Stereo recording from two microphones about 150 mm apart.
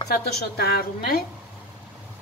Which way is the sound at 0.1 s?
90° left.